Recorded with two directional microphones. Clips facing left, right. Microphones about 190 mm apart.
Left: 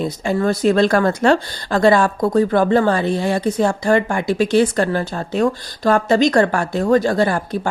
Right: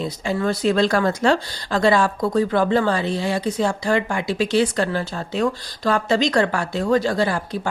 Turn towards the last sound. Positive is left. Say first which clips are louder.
# left 4 dB
turn(degrees=50)  # may be behind; listen again after turning